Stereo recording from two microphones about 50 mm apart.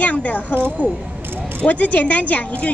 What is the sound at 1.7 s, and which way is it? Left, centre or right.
A woman's voice, left.